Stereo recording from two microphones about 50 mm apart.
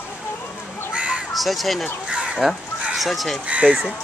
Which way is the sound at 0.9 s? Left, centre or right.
Right.